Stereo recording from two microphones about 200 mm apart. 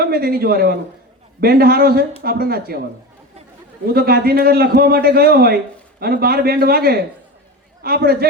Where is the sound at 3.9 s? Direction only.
50° right (ahead or behind).